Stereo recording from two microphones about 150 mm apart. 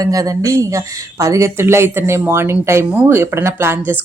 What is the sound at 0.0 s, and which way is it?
Speech, 25° right (ahead or behind).